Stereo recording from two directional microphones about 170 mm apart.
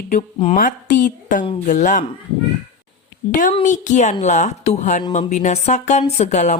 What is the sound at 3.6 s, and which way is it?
A woman's voice, 45° left (ahead or behind).